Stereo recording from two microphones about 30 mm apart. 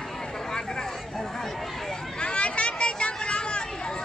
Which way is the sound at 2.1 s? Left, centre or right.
Left.